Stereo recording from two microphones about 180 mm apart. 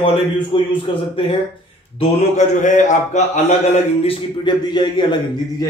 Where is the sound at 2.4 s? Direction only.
40° left (ahead or behind).